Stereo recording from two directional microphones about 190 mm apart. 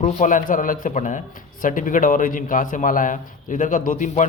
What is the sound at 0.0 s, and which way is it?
A man's voice, 40° left (ahead or behind).